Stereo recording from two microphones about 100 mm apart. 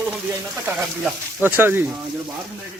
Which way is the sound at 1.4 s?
20° right (ahead or behind).